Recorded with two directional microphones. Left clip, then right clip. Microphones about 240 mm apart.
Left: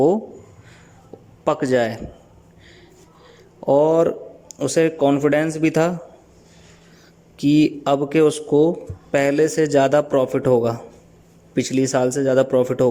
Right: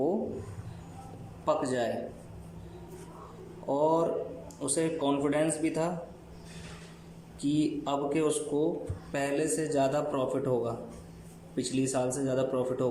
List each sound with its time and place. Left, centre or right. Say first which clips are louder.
1.5 s a man's voice: left 10 dB; left
3.7 s a man's voice: left 12 dB; left
7.3 s speech: left 13 dB; left
7.6 s a man's voice: left 12 dB; left